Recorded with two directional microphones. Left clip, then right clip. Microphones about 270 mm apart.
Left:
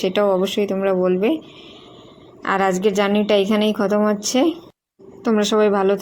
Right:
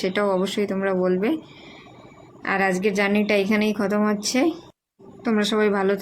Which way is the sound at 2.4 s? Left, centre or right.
Centre.